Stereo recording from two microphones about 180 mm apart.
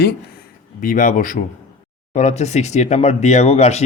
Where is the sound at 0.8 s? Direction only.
45° left (ahead or behind).